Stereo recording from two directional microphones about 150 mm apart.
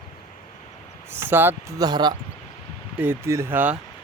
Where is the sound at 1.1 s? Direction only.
15° right (ahead or behind).